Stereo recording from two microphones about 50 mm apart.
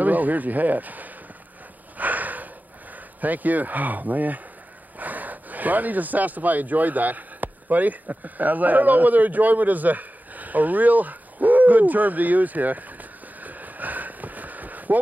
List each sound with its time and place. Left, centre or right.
0.0 s speech: right
2.0 s a sound: right
3.2 s speech: right